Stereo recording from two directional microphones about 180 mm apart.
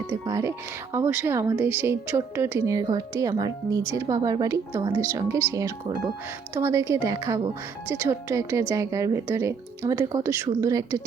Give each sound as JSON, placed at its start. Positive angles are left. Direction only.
{"t": 0.3, "sound": "speech", "side_deg": -20}